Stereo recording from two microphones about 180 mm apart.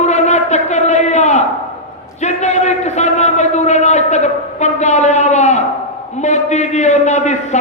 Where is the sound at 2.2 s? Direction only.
40° left (ahead or behind).